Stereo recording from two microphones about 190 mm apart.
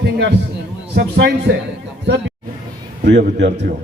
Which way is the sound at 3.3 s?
65° right (ahead or behind).